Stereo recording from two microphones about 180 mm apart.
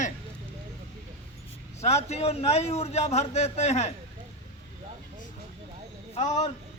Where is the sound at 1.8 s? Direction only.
35° left (ahead or behind).